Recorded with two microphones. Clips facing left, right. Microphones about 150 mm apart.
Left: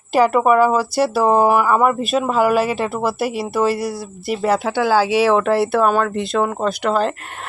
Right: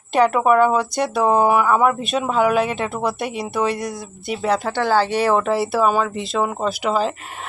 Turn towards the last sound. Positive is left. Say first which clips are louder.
# left 2 dB
turn(degrees=0)  # may be behind; listen again after turning